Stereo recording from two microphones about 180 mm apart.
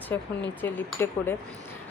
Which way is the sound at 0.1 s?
15° left (ahead or behind).